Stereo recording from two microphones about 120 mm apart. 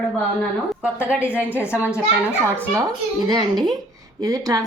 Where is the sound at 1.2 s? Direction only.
15° left (ahead or behind).